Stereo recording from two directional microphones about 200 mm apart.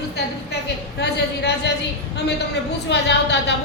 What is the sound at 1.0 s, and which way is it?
Speech, 55° left (ahead or behind).